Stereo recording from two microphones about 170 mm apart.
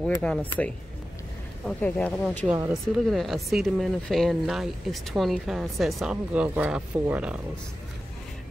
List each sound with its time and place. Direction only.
0.2 s speech: 5° left (ahead or behind)
1.7 s speech: 5° left (ahead or behind)
2.4 s speech: 15° right (ahead or behind)
3.1 s speech: centre (ahead or behind)